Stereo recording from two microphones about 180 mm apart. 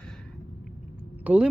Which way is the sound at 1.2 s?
5° right (ahead or behind).